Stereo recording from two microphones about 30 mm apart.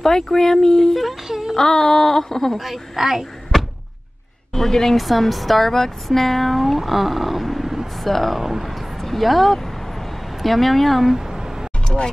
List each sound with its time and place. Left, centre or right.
0.0 s speech: centre
1.2 s speech: centre
1.6 s speech: centre
2.5 s a woman's voice: centre
4.6 s speech: centre
4.9 s a woman's voice: centre
6.8 s speech: centre
8.1 s speech: centre
8.4 s a woman's voice: centre
8.6 s vehicle: centre
10.4 s speech: centre